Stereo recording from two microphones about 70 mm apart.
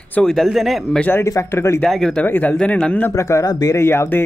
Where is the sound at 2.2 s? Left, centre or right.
Left.